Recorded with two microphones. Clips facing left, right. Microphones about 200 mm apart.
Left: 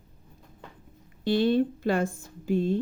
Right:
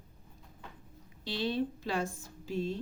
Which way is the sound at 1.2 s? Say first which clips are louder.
Left 10 dB; 55° left (ahead or behind).